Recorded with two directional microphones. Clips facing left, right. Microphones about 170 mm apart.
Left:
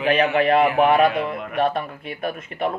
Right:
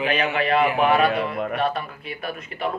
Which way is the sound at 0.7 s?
55° left (ahead or behind).